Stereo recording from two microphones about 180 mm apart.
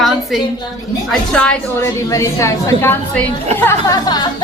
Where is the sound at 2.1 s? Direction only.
15° left (ahead or behind).